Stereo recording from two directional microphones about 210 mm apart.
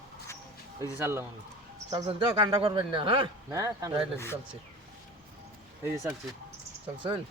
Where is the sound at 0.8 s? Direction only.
10° right (ahead or behind).